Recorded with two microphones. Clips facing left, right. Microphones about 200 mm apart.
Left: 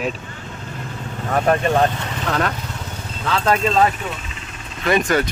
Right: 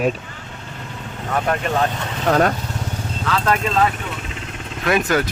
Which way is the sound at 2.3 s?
45° right (ahead or behind).